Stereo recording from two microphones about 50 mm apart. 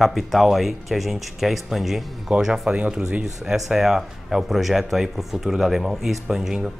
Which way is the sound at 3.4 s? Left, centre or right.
Centre.